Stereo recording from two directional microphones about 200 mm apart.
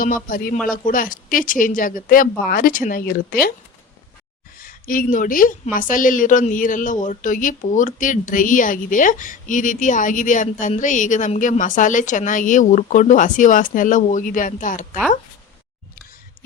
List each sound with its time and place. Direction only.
0.3 s speech: 45° left (ahead or behind)
4.5 s a woman's voice: 45° left (ahead or behind)